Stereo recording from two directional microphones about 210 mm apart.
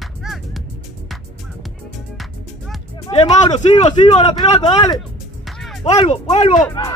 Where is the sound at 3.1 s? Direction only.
25° left (ahead or behind).